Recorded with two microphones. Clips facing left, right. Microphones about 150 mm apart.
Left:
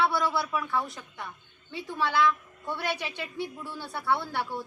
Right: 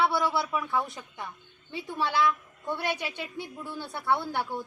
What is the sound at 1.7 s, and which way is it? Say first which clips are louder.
A woman's voice: left 1 dB; 20° right (ahead or behind).